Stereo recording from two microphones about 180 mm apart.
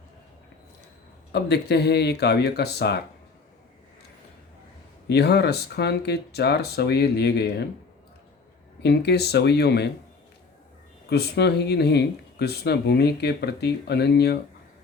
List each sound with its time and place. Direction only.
1.3 s speech: 65° left (ahead or behind)
5.0 s speech: 65° left (ahead or behind)
8.8 s speech: 65° left (ahead or behind)
11.1 s speech: 65° left (ahead or behind)